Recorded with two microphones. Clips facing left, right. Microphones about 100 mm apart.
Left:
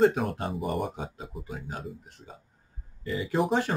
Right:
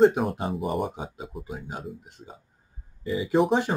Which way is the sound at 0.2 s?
5° right (ahead or behind).